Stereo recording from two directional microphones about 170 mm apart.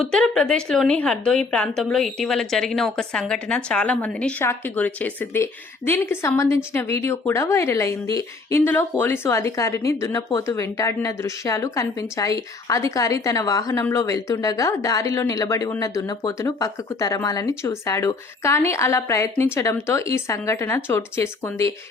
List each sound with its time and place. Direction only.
0.0 s a woman's voice: 5° left (ahead or behind)